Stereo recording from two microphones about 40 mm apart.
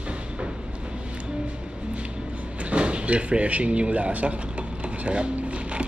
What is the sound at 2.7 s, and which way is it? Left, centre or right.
Speech, right.